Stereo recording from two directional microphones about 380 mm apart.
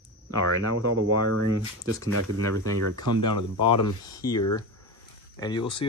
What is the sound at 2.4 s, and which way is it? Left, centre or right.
Speech, centre.